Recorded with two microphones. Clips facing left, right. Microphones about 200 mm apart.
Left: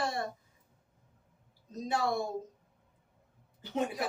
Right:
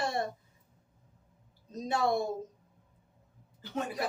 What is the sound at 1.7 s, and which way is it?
Speech, 20° right (ahead or behind).